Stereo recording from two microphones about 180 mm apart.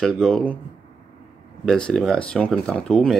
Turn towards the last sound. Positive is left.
turn(degrees=5)  # may be behind; listen again after turning